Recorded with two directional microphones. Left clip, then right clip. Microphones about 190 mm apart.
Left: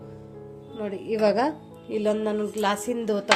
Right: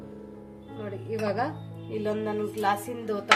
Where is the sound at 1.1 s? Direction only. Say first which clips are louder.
Left 7 dB; 45° left (ahead or behind).